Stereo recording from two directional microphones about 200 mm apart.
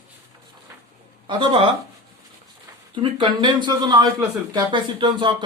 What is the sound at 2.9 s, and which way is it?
Speech, 25° right (ahead or behind).